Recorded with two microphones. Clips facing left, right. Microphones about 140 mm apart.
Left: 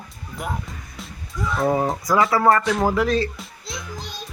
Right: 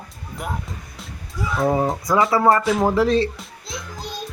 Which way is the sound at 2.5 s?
Centre (ahead or behind).